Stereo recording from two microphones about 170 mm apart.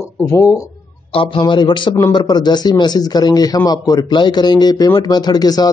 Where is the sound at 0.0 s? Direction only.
15° left (ahead or behind).